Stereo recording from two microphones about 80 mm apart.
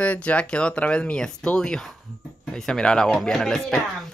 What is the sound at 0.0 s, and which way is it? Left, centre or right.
Speech, centre.